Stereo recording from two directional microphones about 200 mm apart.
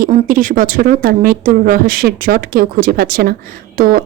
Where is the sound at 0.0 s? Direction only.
45° right (ahead or behind).